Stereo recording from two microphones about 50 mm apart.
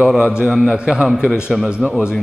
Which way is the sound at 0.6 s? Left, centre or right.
Centre.